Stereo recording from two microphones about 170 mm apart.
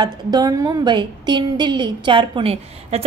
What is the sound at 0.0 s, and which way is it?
A woman's voice, 25° right (ahead or behind).